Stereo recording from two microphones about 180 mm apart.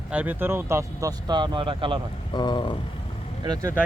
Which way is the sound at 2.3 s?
25° left (ahead or behind).